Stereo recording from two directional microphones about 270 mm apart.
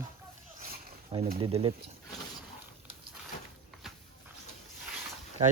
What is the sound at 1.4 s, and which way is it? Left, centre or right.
Speech, centre.